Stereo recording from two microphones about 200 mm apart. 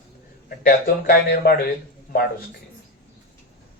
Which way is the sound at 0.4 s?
45° left (ahead or behind).